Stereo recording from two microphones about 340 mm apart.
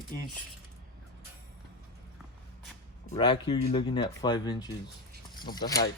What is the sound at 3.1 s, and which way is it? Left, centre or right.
Speech, centre.